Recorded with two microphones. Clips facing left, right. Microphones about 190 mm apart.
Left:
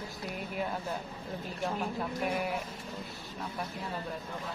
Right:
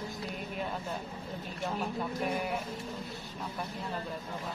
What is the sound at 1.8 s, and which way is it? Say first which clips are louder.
Speech: even; 5° left (ahead or behind).